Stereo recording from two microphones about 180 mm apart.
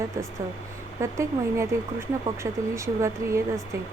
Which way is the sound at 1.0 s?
15° right (ahead or behind).